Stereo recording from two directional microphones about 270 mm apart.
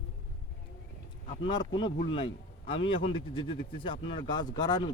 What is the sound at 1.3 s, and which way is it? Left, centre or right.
A man's voice, centre.